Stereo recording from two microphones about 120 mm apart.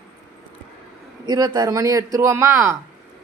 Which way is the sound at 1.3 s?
35° right (ahead or behind).